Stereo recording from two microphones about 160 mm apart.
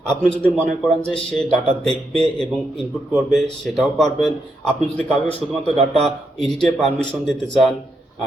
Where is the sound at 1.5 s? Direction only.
40° right (ahead or behind).